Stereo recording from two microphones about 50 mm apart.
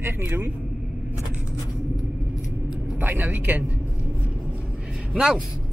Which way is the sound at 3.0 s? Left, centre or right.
Right.